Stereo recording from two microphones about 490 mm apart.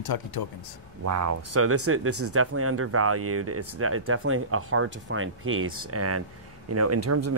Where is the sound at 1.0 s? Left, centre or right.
Right.